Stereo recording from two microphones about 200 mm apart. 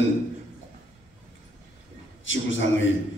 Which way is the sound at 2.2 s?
70° left (ahead or behind).